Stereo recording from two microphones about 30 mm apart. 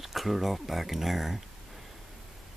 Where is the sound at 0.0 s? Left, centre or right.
Centre.